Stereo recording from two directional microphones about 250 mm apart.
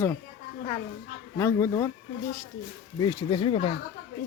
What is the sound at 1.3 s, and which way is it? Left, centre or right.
Speech, centre.